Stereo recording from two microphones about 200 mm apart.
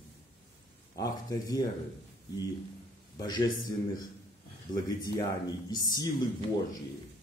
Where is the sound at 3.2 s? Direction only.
20° left (ahead or behind).